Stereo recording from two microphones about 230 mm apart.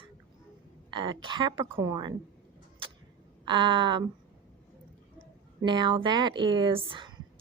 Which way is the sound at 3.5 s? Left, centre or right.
Right.